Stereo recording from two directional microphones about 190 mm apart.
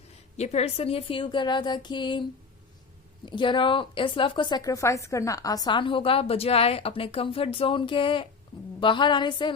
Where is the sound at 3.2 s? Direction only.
25° left (ahead or behind).